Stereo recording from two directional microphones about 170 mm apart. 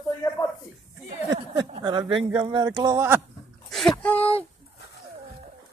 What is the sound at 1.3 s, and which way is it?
Speech, 25° right (ahead or behind).